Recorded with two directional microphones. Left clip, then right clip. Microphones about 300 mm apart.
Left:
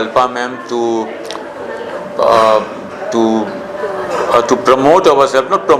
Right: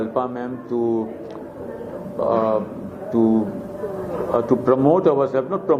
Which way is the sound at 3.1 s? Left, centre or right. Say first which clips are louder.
Left 6 dB; left.